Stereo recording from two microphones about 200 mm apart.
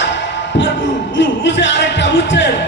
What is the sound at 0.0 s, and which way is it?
Music, 65° left (ahead or behind).